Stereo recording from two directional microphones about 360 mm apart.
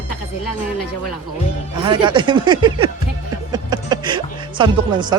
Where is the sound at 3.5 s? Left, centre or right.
Centre.